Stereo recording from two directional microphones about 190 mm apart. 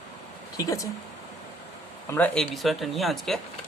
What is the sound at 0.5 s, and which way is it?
Speech, 20° left (ahead or behind).